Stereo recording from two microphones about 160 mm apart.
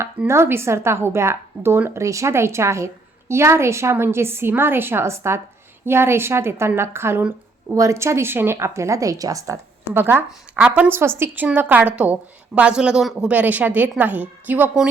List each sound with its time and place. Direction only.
0.0 s a woman's voice: 15° right (ahead or behind)